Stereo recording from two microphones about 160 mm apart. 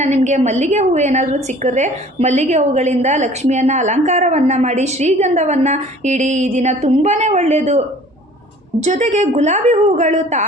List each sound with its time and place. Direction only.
0.0 s a woman's voice: 45° right (ahead or behind)